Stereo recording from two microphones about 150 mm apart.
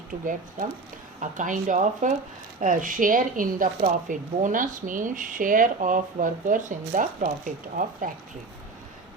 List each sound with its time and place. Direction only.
1.2 s speech: 55° right (ahead or behind)